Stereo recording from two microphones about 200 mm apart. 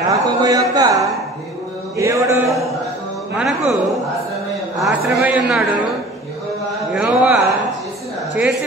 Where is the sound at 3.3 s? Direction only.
5° right (ahead or behind).